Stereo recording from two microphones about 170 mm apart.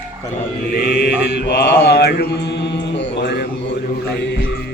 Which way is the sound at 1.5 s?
70° left (ahead or behind).